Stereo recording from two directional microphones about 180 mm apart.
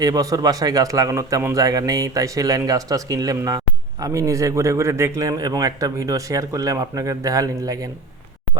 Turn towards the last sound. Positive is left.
turn(degrees=-20)  # may be behind; listen again after turning